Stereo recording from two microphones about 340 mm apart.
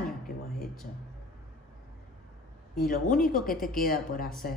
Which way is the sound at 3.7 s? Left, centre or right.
Left.